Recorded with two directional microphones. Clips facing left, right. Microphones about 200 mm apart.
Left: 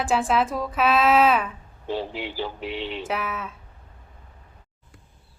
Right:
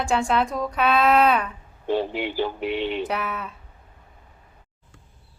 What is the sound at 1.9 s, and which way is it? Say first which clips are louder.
A man's voice: right 5 dB; 55° right (ahead or behind).